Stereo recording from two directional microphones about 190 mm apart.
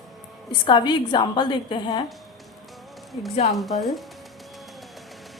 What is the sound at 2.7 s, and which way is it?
Music, centre (ahead or behind).